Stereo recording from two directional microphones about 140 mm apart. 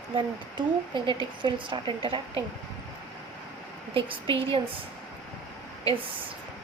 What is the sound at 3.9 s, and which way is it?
Speech, 40° right (ahead or behind).